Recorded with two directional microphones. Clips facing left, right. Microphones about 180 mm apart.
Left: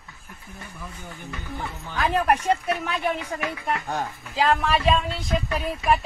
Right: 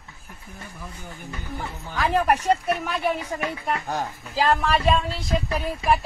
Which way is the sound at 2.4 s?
35° right (ahead or behind).